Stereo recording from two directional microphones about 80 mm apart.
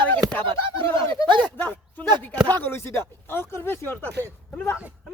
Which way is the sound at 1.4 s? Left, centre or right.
Left.